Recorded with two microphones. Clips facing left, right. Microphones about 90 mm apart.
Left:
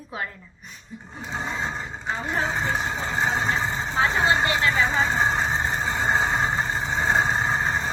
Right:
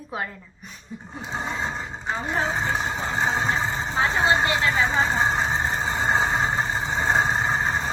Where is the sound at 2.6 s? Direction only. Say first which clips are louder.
Even; 15° right (ahead or behind).